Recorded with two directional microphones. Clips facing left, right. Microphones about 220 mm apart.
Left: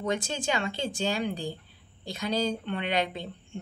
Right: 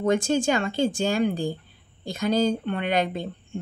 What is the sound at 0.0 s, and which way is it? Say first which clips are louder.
Speech: right 8 dB; 50° right (ahead or behind).